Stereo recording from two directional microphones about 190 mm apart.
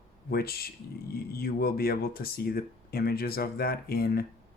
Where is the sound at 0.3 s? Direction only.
55° left (ahead or behind).